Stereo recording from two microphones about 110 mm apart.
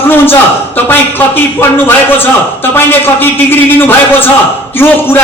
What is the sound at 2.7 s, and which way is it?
A man's voice, 20° left (ahead or behind).